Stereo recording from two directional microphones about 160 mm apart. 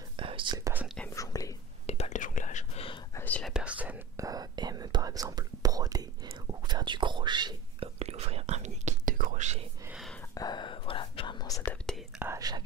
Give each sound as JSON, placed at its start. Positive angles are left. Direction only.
{"t": 0.2, "sound": "whispering", "side_deg": -35}
{"t": 1.1, "sound": "whispering", "side_deg": 20}
{"t": 1.9, "sound": "whispering", "side_deg": 45}
{"t": 3.2, "sound": "whispering", "side_deg": 10}
{"t": 3.5, "sound": "whispering", "side_deg": -10}
{"t": 4.2, "sound": "whispering", "side_deg": -25}
{"t": 8.0, "sound": "whispering", "side_deg": -40}
{"t": 9.8, "sound": "whispering", "side_deg": -5}
{"t": 10.3, "sound": "whispering", "side_deg": 25}
{"t": 12.2, "sound": "whispering", "side_deg": -20}